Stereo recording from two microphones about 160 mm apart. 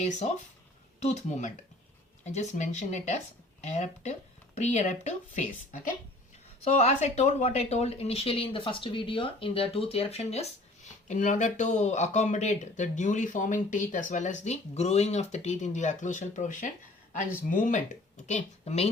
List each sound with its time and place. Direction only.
1.0 s speech: 50° left (ahead or behind)